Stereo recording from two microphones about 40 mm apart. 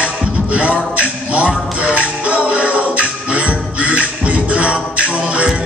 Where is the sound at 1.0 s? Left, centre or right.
Right.